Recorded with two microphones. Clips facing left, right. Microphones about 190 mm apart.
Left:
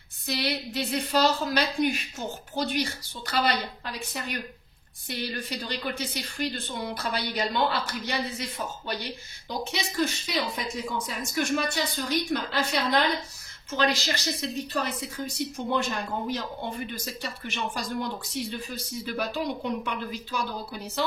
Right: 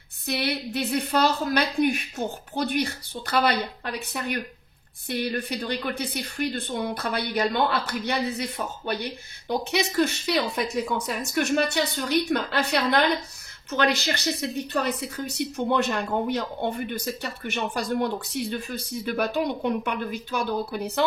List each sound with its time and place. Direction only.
0.3 s a woman's voice: 60° right (ahead or behind)